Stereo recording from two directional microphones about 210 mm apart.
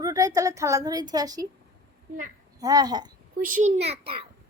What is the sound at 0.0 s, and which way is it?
A woman's voice, 15° right (ahead or behind).